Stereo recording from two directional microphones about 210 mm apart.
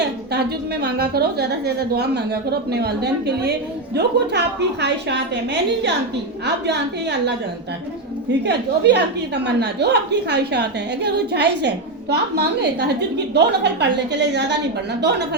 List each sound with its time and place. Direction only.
0.0 s a woman's voice: 55° right (ahead or behind)
8.3 s a woman's voice: 55° right (ahead or behind)